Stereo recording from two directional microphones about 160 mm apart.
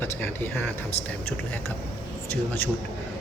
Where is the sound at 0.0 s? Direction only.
15° left (ahead or behind).